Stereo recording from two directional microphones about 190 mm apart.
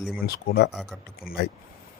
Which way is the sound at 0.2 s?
55° left (ahead or behind).